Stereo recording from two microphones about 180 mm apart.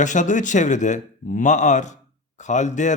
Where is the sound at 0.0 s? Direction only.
45° left (ahead or behind).